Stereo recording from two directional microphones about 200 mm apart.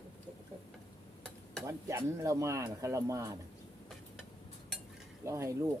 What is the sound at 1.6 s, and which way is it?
Speech, 15° right (ahead or behind).